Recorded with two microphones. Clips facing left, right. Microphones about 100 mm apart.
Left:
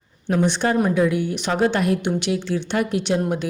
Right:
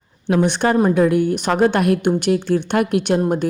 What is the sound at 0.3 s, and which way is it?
A woman's voice, 55° right (ahead or behind).